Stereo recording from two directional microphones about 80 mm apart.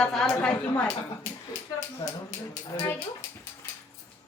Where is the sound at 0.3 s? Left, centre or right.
Centre.